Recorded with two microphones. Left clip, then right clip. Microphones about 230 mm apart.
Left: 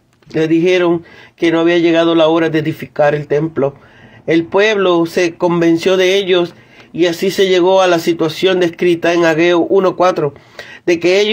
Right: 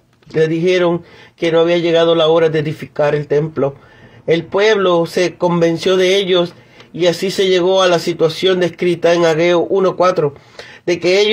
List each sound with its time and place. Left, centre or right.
0.3 s a man's voice: left